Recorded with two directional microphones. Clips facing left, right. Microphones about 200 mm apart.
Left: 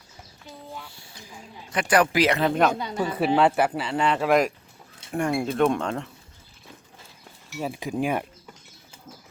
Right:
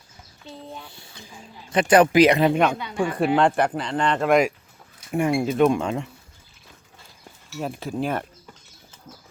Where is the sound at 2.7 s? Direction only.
35° left (ahead or behind).